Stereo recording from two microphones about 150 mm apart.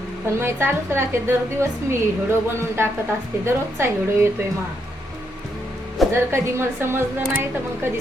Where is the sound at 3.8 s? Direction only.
15° right (ahead or behind).